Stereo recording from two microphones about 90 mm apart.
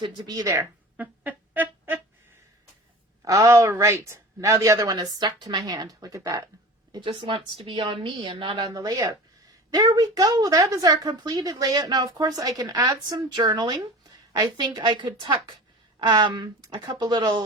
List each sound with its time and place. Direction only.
0.3 s a woman's voice: 40° right (ahead or behind)
0.9 s music: 20° right (ahead or behind)
3.2 s a woman's voice: 40° right (ahead or behind)
5.2 s speech: 60° right (ahead or behind); by 6.4 s 40° right (ahead or behind)
7.0 s a woman's voice: 75° right (ahead or behind)
8.5 s a woman's voice: 45° right (ahead or behind)